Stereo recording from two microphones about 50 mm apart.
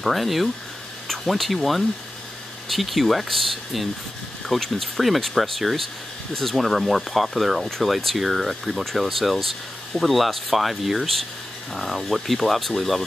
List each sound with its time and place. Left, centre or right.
0.0 s speech: centre